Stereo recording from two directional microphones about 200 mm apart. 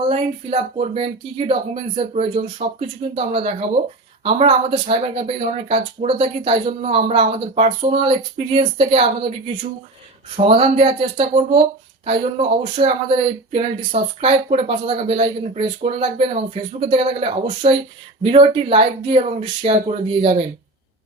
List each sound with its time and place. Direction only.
0.1 s speech: 30° right (ahead or behind)
10.3 s speech: 30° right (ahead or behind)